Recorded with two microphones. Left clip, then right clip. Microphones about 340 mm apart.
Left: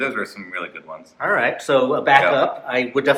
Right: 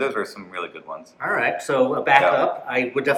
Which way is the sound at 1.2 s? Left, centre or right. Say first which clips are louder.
Left 3 dB; centre.